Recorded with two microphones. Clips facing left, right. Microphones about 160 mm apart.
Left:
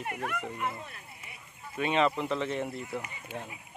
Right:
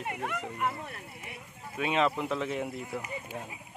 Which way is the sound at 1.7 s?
Centre (ahead or behind).